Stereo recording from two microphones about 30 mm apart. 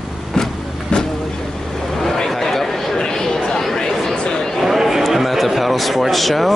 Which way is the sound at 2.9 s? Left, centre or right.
Left.